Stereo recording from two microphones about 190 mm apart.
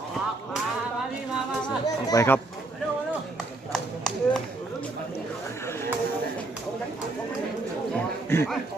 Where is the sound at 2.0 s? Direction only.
15° left (ahead or behind).